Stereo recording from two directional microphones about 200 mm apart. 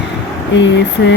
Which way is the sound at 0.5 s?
60° left (ahead or behind).